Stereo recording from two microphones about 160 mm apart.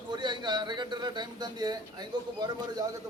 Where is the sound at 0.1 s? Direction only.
30° right (ahead or behind).